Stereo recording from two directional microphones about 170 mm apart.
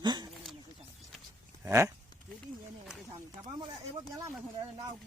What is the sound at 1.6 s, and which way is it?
Speech, 15° right (ahead or behind).